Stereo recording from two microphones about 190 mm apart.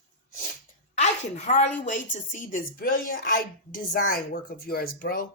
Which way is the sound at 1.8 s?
40° left (ahead or behind).